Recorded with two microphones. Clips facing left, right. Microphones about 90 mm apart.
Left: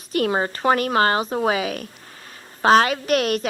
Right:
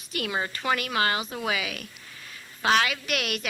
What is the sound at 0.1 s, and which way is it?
A woman's voice, 40° left (ahead or behind).